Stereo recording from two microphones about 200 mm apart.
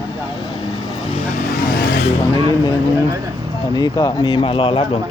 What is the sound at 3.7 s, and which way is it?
Speech, 20° left (ahead or behind).